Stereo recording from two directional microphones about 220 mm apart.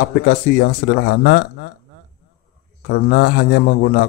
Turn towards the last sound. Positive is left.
turn(degrees=45)  # may be behind; listen again after turning